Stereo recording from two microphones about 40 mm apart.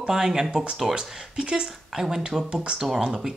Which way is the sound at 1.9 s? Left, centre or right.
Centre.